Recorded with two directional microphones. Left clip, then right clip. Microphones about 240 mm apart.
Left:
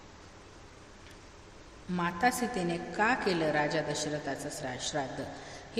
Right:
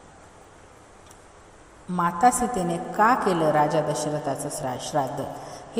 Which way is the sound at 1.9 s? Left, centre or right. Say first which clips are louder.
Right 9 dB; centre.